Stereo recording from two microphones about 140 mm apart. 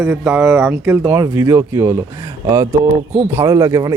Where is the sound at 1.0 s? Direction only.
15° right (ahead or behind).